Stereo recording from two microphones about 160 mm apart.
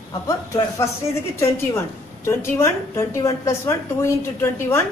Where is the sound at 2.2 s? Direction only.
15° left (ahead or behind).